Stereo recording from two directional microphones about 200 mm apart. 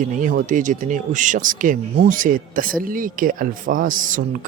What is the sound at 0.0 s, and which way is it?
Speech, 40° right (ahead or behind).